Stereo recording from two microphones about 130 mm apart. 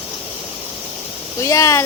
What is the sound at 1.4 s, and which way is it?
Speech, 25° left (ahead or behind).